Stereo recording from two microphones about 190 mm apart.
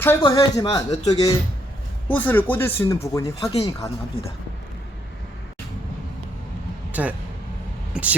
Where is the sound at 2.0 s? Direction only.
10° left (ahead or behind).